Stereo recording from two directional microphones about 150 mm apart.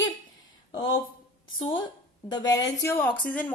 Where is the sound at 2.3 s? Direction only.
25° left (ahead or behind).